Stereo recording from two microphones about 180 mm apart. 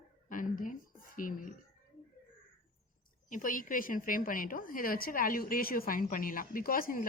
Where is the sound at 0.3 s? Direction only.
45° left (ahead or behind).